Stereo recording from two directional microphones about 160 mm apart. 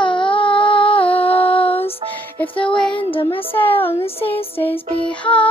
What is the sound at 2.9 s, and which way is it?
Child singing, 30° left (ahead or behind).